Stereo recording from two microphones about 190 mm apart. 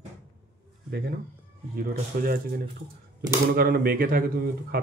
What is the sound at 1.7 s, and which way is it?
Speech, 50° right (ahead or behind).